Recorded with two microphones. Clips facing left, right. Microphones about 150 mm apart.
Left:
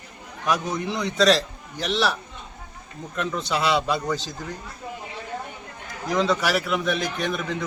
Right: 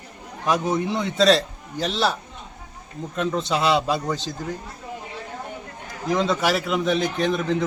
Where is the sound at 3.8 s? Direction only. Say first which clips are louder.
Right 1 dB; 25° right (ahead or behind).